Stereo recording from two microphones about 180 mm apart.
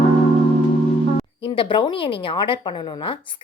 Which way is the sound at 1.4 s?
30° left (ahead or behind).